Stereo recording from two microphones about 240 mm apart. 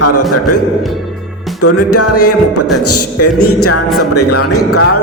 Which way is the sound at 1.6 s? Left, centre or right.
Left.